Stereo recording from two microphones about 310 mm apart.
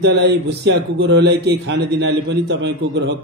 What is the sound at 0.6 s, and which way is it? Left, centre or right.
A man's voice, right.